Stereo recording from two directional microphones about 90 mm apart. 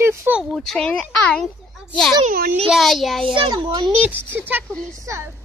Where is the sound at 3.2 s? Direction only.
65° right (ahead or behind).